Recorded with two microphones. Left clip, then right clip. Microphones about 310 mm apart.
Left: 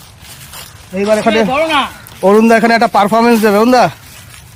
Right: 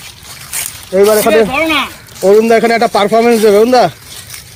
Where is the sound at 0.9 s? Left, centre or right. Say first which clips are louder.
Right 4 dB; centre.